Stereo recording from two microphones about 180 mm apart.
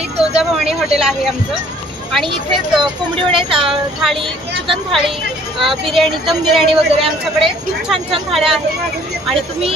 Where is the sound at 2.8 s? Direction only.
30° right (ahead or behind).